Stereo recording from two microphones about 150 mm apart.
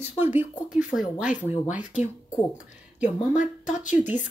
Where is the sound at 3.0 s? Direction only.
55° left (ahead or behind).